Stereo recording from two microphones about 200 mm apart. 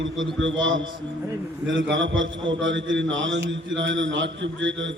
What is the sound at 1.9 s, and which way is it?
A man's voice, 70° right (ahead or behind).